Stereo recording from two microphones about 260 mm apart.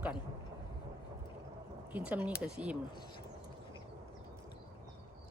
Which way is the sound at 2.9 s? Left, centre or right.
Centre.